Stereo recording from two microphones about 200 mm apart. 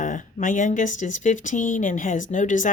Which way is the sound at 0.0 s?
40° left (ahead or behind).